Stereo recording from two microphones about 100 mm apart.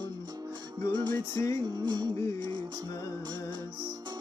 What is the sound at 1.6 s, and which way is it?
Music, 45° right (ahead or behind).